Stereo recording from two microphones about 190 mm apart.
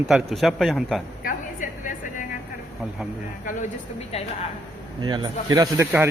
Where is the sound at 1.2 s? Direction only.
45° left (ahead or behind).